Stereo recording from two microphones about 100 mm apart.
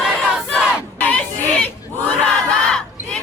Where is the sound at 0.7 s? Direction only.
15° left (ahead or behind).